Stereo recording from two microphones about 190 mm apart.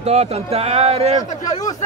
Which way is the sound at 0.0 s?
35° right (ahead or behind).